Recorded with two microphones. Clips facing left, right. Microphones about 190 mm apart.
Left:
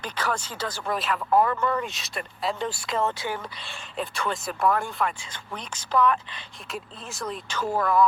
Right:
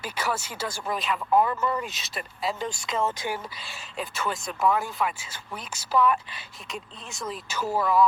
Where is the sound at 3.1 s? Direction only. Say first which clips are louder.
Even; 15° right (ahead or behind).